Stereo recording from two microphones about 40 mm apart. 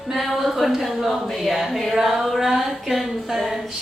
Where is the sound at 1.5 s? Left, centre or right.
Centre.